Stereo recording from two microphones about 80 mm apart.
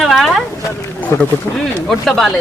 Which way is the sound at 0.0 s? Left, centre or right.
Centre.